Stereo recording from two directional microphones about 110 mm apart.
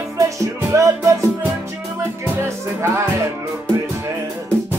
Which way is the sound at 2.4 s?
25° right (ahead or behind).